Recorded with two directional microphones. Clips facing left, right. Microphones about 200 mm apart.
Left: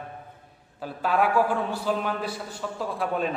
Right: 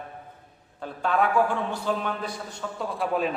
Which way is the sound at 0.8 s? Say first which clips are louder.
Even; 5° left (ahead or behind).